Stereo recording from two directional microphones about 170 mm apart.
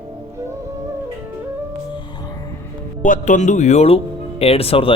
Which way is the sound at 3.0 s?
50° left (ahead or behind).